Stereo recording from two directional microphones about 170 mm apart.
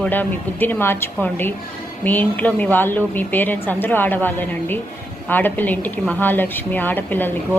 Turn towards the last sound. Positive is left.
turn(degrees=10)  # may be behind; listen again after turning